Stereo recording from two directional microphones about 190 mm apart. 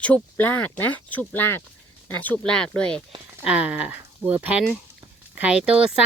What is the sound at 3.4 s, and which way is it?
Speech, 5° right (ahead or behind).